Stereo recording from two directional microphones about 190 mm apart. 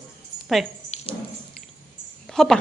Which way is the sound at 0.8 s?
35° left (ahead or behind).